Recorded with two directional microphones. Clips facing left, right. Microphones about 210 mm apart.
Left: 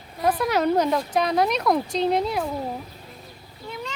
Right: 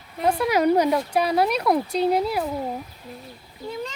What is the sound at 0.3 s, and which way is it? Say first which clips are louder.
Speech: right 2 dB; 10° right (ahead or behind).